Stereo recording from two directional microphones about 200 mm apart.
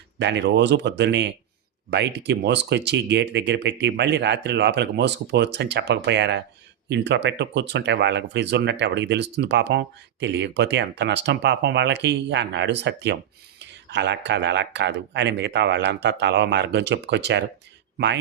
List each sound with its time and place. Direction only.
0.2 s speech: 60° right (ahead or behind)